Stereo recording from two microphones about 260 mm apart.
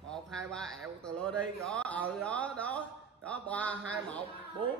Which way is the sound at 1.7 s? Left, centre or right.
Centre.